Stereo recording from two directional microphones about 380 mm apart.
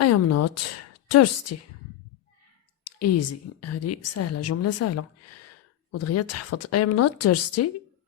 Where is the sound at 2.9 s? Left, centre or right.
Left.